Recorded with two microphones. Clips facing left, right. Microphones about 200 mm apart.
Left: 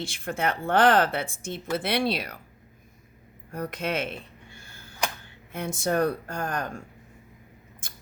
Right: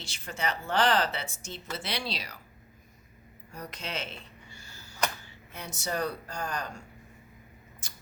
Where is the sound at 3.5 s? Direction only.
55° left (ahead or behind).